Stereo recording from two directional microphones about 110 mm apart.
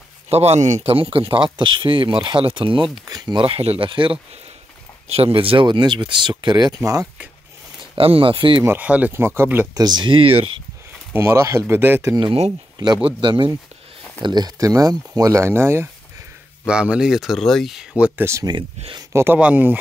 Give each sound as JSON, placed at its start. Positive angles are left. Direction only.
{"t": 0.3, "sound": "speech", "side_deg": -75}
{"t": 3.4, "sound": "speech", "side_deg": -60}
{"t": 5.0, "sound": "speech", "side_deg": -65}
{"t": 7.9, "sound": "speech", "side_deg": -55}
{"t": 8.6, "sound": "speech", "side_deg": -15}
{"t": 9.8, "sound": "speech", "side_deg": -40}
{"t": 11.1, "sound": "speech", "side_deg": -25}
{"t": 12.7, "sound": "speech", "side_deg": -40}
{"t": 16.6, "sound": "speech", "side_deg": -10}
{"t": 18.5, "sound": "speech", "side_deg": -40}
{"t": 19.1, "sound": "speech", "side_deg": -15}